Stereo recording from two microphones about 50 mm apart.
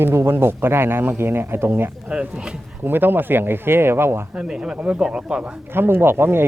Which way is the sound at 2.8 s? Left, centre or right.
Right.